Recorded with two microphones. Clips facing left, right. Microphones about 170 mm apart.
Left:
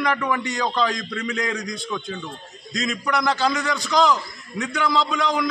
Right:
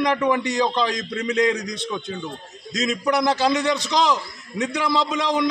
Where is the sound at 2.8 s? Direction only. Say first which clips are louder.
Right 3 dB; 30° right (ahead or behind).